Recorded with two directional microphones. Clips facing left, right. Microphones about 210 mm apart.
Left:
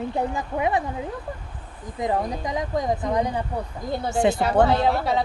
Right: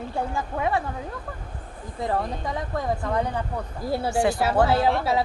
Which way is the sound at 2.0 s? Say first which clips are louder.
Left 2 dB; 15° left (ahead or behind).